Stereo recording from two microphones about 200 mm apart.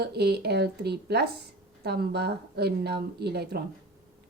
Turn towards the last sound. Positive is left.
turn(degrees=-55)  # may be behind; listen again after turning